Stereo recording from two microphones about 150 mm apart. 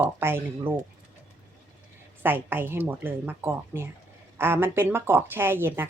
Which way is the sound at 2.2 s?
15° right (ahead or behind).